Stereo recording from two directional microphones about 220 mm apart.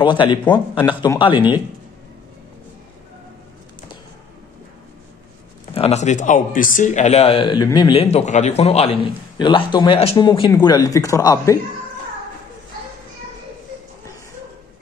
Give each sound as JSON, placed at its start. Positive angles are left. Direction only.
{"t": 0.0, "sound": "speech", "side_deg": 20}
{"t": 5.8, "sound": "speech", "side_deg": 30}